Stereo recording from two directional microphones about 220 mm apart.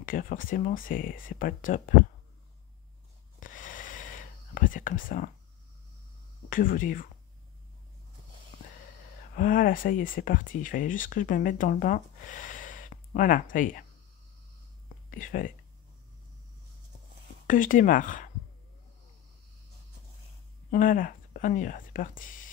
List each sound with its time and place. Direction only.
0.0 s speech: 40° left (ahead or behind)
3.3 s whispering: 35° left (ahead or behind)
6.5 s speech: 40° left (ahead or behind)
9.3 s speech: 40° left (ahead or behind)
15.0 s speech: 40° left (ahead or behind)
17.5 s speech: 35° left (ahead or behind)
20.7 s speech: 40° left (ahead or behind)